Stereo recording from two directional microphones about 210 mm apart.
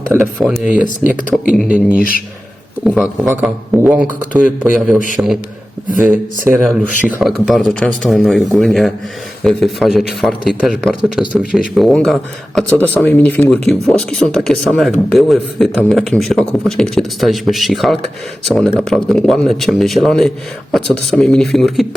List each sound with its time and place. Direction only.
0.3 s a man's voice: centre (ahead or behind)
2.0 s speech: 45° left (ahead or behind)
2.8 s a man's voice: 5° right (ahead or behind)